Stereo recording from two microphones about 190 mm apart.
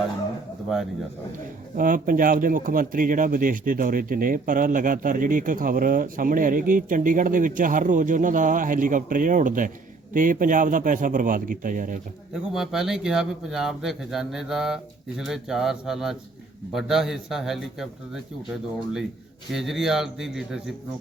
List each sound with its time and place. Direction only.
1.7 s speech: 45° right (ahead or behind)
12.3 s speech: centre (ahead or behind)